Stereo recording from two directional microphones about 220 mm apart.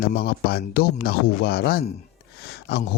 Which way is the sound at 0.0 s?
45° left (ahead or behind).